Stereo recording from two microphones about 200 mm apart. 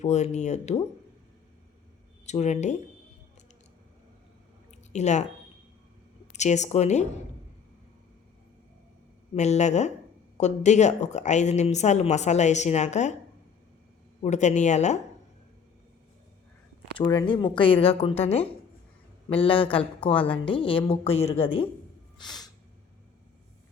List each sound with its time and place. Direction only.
0.0 s a woman's voice: 35° left (ahead or behind)
2.2 s a woman's voice: 35° left (ahead or behind)
4.9 s speech: 35° left (ahead or behind)
6.3 s a woman's voice: 35° left (ahead or behind)
9.3 s a woman's voice: 35° left (ahead or behind)
14.2 s a woman's voice: 35° left (ahead or behind)
17.0 s a woman's voice: 20° left (ahead or behind)
22.2 s snort: 20° left (ahead or behind)